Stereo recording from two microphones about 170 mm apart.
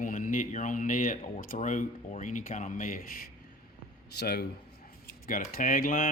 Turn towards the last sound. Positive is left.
turn(degrees=55)  # may be behind; listen again after turning